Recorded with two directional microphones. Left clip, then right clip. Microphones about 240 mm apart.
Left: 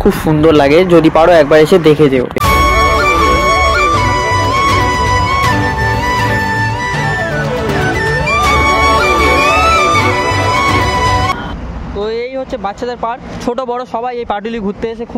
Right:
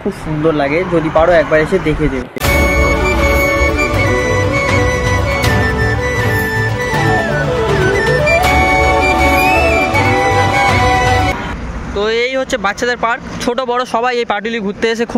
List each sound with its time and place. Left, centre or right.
0.5 s speech: left
12.2 s speech: centre